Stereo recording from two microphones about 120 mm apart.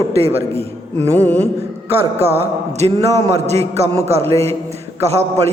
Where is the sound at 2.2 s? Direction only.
55° right (ahead or behind).